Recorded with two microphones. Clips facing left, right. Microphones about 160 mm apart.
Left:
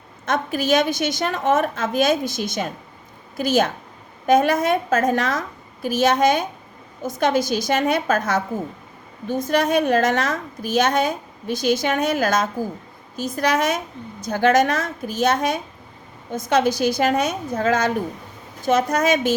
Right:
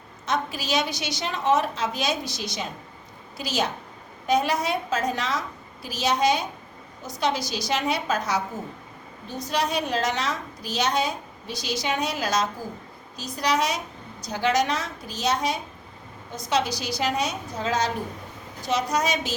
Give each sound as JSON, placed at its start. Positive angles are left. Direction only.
{"t": 0.3, "sound": "a woman's voice", "side_deg": 50}